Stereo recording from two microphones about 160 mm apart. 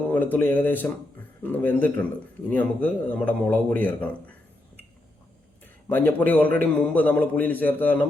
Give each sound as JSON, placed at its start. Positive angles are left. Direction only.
{"t": 0.1, "sound": "a man's voice", "side_deg": 10}
{"t": 5.9, "sound": "a man's voice", "side_deg": 10}